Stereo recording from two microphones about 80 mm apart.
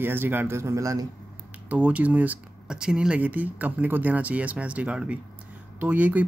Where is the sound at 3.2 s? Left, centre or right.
Right.